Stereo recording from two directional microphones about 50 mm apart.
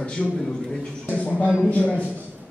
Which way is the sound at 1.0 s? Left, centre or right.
Left.